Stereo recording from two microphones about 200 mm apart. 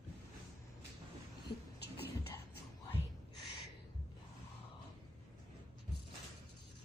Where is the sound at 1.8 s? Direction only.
55° left (ahead or behind).